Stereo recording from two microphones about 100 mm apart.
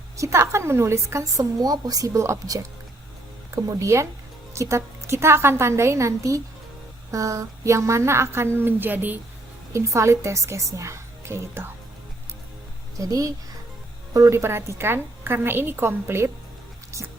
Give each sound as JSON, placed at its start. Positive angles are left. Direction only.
{"t": 0.2, "sound": "a woman's voice", "side_deg": -30}
{"t": 9.7, "sound": "a woman's voice", "side_deg": -30}
{"t": 13.0, "sound": "a woman's voice", "side_deg": -35}